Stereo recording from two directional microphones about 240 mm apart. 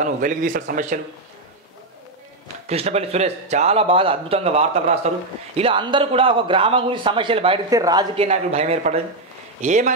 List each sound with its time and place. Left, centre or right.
0.0 s speech: right
2.4 s a man's voice: right